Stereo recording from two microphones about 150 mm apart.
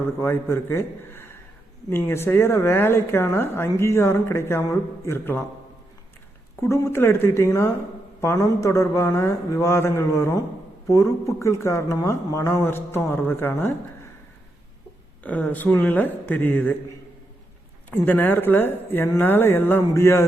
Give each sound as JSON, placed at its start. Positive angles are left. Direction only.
{"t": 0.2, "sound": "speech", "side_deg": 15}
{"t": 6.6, "sound": "speech", "side_deg": 20}
{"t": 15.2, "sound": "speech", "side_deg": 10}
{"t": 18.0, "sound": "speech", "side_deg": 10}